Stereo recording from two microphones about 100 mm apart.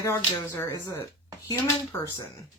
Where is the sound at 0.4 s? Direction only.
30° left (ahead or behind).